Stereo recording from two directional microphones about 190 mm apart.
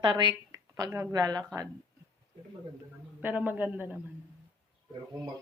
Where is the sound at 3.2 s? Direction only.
10° right (ahead or behind).